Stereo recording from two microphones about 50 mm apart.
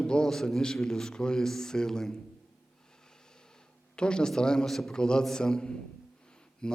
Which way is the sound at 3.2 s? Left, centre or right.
Centre.